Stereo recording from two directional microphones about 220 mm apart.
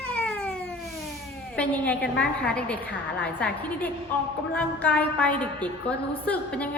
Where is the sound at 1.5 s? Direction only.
5° left (ahead or behind).